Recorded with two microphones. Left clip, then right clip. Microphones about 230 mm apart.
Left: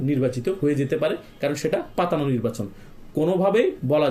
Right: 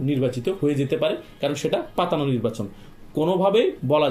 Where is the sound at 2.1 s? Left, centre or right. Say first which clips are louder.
Right 1 dB; centre.